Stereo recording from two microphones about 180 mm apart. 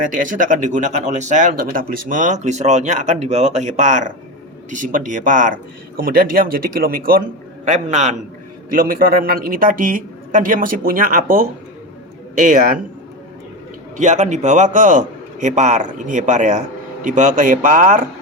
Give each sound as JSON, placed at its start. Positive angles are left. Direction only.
{"t": 0.1, "sound": "a man's voice", "side_deg": -45}
{"t": 8.7, "sound": "a man's voice", "side_deg": -50}
{"t": 14.0, "sound": "a man's voice", "side_deg": -40}